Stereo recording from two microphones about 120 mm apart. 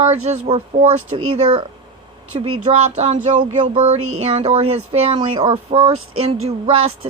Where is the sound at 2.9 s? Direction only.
70° right (ahead or behind).